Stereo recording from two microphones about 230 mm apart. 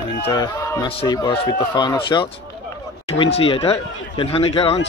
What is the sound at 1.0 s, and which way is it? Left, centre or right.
Speech, centre.